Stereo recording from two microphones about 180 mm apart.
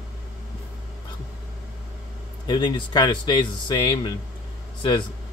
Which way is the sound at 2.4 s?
25° left (ahead or behind).